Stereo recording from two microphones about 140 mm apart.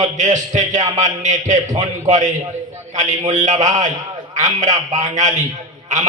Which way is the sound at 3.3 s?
60° right (ahead or behind).